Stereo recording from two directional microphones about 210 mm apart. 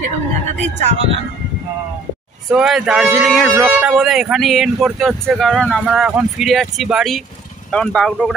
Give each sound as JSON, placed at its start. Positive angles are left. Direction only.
{"t": 0.7, "sound": "speech", "side_deg": -30}
{"t": 2.5, "sound": "speech", "side_deg": 0}